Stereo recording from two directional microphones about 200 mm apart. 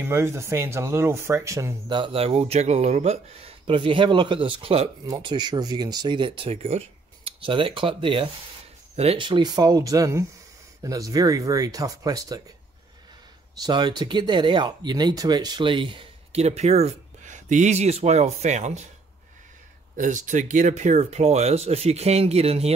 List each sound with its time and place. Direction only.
0.0 s speech: 15° right (ahead or behind)
13.6 s speech: 20° right (ahead or behind)
20.0 s speech: 40° right (ahead or behind)